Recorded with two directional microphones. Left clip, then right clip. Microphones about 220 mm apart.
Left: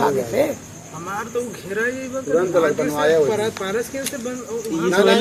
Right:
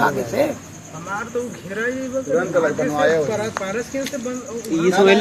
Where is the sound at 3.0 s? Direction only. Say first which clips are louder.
Left 1 dB; 35° left (ahead or behind).